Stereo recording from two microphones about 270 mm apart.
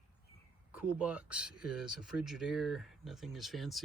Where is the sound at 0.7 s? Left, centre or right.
Centre.